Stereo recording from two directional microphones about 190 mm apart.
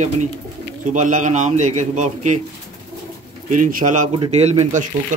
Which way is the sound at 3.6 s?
45° right (ahead or behind).